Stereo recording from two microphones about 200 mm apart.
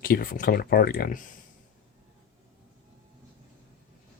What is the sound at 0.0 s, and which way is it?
Speech, 45° left (ahead or behind).